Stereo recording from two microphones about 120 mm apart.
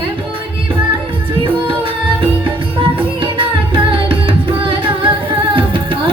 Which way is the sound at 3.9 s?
45° right (ahead or behind).